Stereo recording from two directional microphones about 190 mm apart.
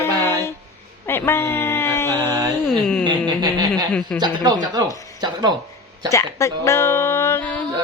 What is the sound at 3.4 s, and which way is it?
Speech, 20° right (ahead or behind).